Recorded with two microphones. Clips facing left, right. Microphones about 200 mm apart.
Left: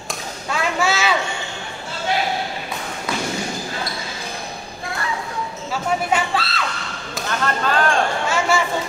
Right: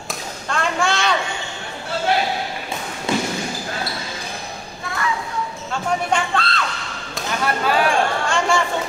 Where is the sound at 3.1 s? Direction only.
25° right (ahead or behind).